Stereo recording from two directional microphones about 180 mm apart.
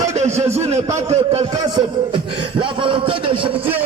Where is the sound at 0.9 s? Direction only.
30° right (ahead or behind).